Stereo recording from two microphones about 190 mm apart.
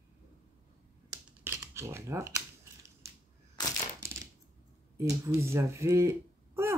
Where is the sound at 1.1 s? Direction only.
15° right (ahead or behind).